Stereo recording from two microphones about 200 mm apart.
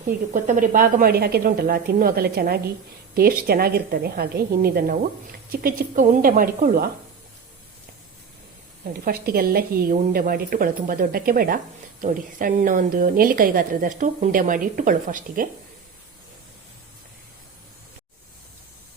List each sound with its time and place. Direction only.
0.3 s a woman's voice: 40° right (ahead or behind)
8.9 s a woman's voice: 50° right (ahead or behind)